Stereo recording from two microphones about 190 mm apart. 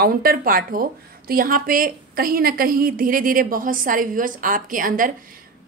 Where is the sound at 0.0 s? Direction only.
50° right (ahead or behind).